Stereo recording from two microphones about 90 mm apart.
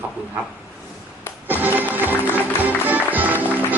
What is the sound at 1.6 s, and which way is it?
Music, 20° right (ahead or behind).